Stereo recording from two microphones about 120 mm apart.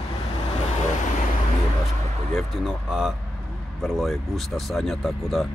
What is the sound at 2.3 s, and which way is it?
Speech, centre (ahead or behind).